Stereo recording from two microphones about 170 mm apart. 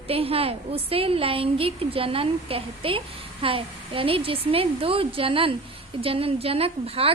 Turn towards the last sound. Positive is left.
turn(degrees=-35)  # may be behind; listen again after turning